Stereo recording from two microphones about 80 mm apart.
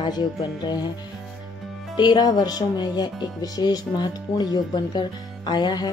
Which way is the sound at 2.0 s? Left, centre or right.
Left.